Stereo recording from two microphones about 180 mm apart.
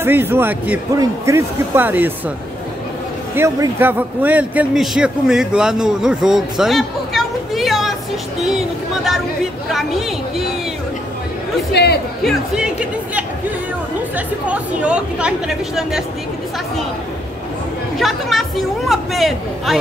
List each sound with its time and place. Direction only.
0.0 s speech: 10° right (ahead or behind)
3.3 s a man's voice: 15° right (ahead or behind); by 10.5 s centre (ahead or behind)
11.7 s speech: 65° left (ahead or behind)
12.2 s a man's voice: centre (ahead or behind)
17.9 s a man's voice: centre (ahead or behind)